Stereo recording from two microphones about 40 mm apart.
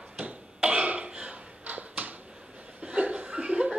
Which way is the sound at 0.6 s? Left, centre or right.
Right.